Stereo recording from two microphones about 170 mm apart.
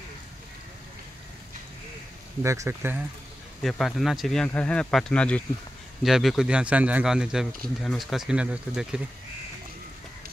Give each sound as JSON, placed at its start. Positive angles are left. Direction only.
{"t": 2.4, "sound": "speech", "side_deg": -15}
{"t": 3.6, "sound": "speech", "side_deg": 0}